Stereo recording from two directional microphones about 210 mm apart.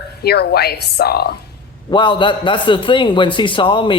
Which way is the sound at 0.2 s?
50° left (ahead or behind).